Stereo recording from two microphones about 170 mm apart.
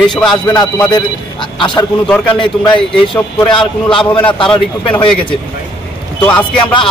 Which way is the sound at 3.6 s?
5° left (ahead or behind).